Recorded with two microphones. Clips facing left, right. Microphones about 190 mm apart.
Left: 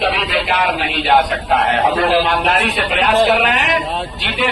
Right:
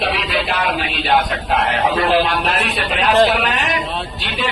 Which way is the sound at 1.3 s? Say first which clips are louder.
Left 3 dB; 45° left (ahead or behind).